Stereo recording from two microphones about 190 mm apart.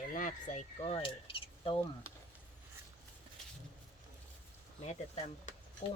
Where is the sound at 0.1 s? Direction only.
45° left (ahead or behind); by 1.8 s 30° left (ahead or behind).